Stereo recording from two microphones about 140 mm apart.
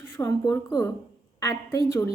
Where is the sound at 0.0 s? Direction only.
15° left (ahead or behind).